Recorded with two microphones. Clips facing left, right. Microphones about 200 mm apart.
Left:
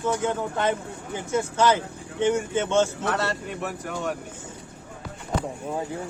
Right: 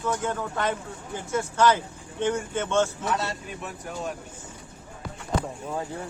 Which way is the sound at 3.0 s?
65° left (ahead or behind).